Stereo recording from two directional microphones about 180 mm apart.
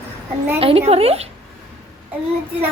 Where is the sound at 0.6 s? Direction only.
35° right (ahead or behind).